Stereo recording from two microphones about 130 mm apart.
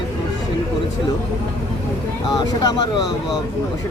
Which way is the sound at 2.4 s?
30° left (ahead or behind).